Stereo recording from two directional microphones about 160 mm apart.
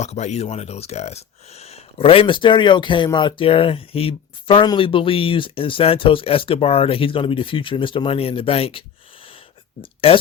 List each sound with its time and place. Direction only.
0.0 s speech: 45° left (ahead or behind)
9.8 s speech: 35° left (ahead or behind)